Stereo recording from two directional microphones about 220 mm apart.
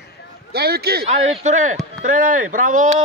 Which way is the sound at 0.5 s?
45° right (ahead or behind).